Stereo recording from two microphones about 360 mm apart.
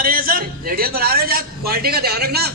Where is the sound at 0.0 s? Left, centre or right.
Right.